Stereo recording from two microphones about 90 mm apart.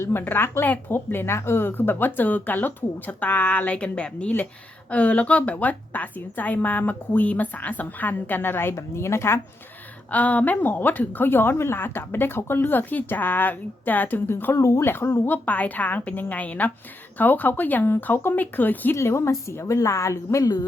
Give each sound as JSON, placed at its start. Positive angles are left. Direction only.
{"t": 0.0, "sound": "a woman's voice", "side_deg": 25}
{"t": 10.1, "sound": "a woman's voice", "side_deg": 15}
{"t": 20.4, "sound": "a sound", "side_deg": 50}